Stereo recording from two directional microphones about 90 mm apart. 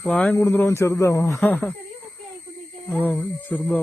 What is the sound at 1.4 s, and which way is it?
Speech, 15° left (ahead or behind).